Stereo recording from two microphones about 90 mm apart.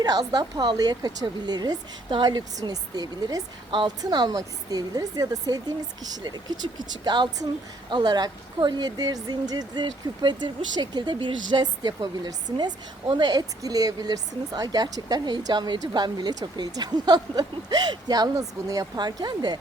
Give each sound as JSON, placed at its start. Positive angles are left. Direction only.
{"t": 0.0, "sound": "speech", "side_deg": -45}
{"t": 3.7, "sound": "a woman's voice", "side_deg": -70}
{"t": 4.0, "sound": "speech", "side_deg": -50}